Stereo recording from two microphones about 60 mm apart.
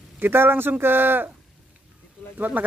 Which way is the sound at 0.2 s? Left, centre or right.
Right.